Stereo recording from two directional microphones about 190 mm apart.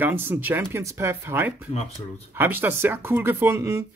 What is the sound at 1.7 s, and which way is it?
Speech, 35° left (ahead or behind).